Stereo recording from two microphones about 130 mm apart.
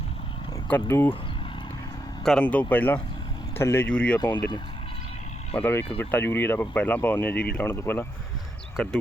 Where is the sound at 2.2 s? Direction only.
10° left (ahead or behind).